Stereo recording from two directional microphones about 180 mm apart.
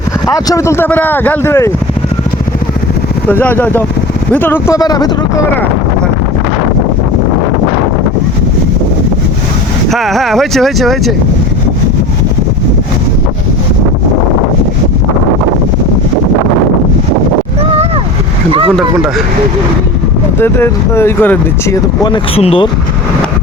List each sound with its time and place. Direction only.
0.3 s speech: 20° left (ahead or behind)
3.2 s speech: 10° left (ahead or behind)
9.9 s speech: centre (ahead or behind)
17.6 s a sound: 35° right (ahead or behind)
18.8 s speech: centre (ahead or behind)
20.4 s speech: 15° left (ahead or behind)
22.0 s speech: 30° left (ahead or behind)